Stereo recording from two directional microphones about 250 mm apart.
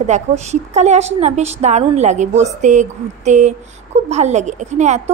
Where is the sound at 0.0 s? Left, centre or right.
Right.